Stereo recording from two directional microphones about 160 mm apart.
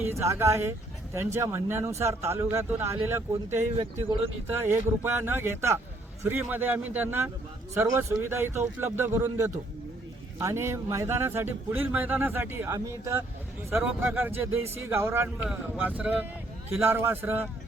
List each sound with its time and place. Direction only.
0.0 s a man's voice: 15° right (ahead or behind)